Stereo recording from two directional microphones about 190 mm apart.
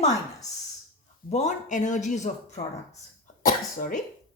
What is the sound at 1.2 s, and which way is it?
Speech, 35° left (ahead or behind).